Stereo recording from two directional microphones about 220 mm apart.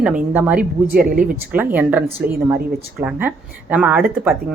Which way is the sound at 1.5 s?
10° right (ahead or behind).